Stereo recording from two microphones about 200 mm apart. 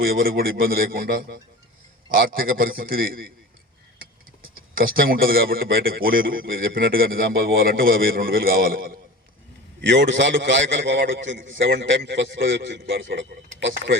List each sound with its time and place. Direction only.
0.0 s a man's voice: 50° right (ahead or behind)
4.7 s a man's voice: 45° right (ahead or behind)
9.8 s a man's voice: 65° right (ahead or behind)